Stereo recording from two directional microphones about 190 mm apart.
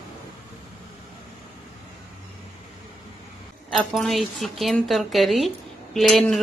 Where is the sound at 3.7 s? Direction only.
Centre (ahead or behind).